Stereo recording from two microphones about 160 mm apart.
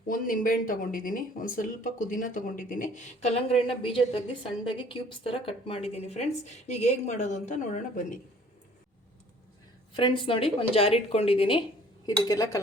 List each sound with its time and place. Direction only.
0.1 s speech: 60° left (ahead or behind)
9.9 s a woman's voice: 30° left (ahead or behind)
12.0 s speech: 25° left (ahead or behind)